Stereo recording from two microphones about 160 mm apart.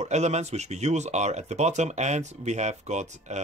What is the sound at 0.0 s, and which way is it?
Speech, 45° right (ahead or behind).